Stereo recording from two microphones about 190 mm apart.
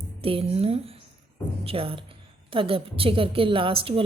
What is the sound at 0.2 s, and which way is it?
A woman's voice, 30° right (ahead or behind).